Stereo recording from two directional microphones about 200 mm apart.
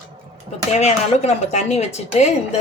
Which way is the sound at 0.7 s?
35° left (ahead or behind).